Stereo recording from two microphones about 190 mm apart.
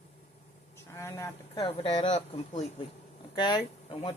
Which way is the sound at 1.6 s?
30° left (ahead or behind).